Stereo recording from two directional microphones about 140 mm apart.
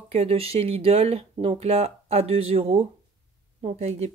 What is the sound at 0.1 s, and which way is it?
Speech, 45° right (ahead or behind).